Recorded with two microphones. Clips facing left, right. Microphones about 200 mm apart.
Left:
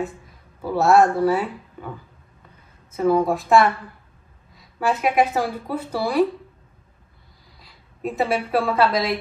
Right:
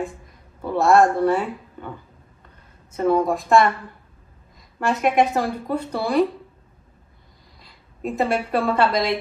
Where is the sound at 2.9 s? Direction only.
Centre (ahead or behind).